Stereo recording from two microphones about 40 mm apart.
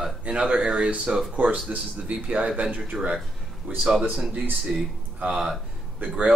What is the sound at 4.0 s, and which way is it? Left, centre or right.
A man's voice, centre.